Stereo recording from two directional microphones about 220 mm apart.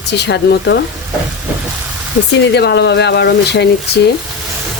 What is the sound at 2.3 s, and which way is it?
Speech, 50° left (ahead or behind).